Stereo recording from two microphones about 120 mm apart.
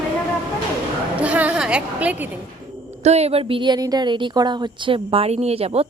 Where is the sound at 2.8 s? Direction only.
65° right (ahead or behind).